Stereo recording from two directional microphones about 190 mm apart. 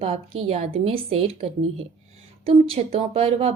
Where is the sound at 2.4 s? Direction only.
30° right (ahead or behind).